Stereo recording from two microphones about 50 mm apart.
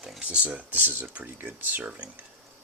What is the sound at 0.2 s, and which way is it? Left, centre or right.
Speech, right.